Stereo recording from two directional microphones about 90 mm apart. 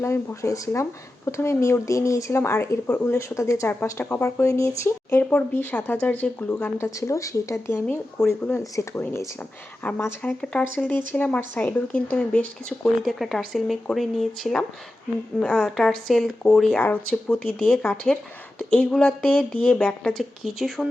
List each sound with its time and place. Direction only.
0.0 s speech: 30° left (ahead or behind); by 6.3 s 15° left (ahead or behind)
6.7 s speech: 30° left (ahead or behind)
9.8 s speech: 20° left (ahead or behind)
10.2 s speech: 10° left (ahead or behind)